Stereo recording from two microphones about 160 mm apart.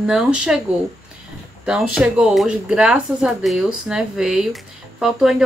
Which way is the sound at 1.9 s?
5° right (ahead or behind).